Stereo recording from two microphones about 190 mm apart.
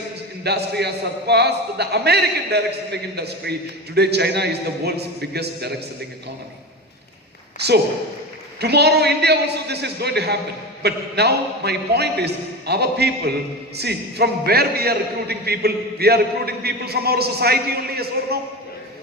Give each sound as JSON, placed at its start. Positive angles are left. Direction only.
{"t": 0.4, "sound": "a man's voice", "side_deg": -60}
{"t": 8.6, "sound": "a man's voice", "side_deg": -60}